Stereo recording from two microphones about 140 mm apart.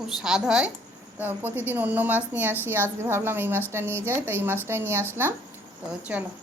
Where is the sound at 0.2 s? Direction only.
5° right (ahead or behind).